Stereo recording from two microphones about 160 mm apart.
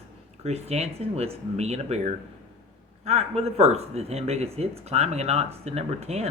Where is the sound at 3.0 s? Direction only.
40° right (ahead or behind).